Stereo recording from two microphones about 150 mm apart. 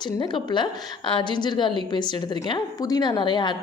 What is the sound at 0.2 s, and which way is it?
A woman's voice, 30° left (ahead or behind).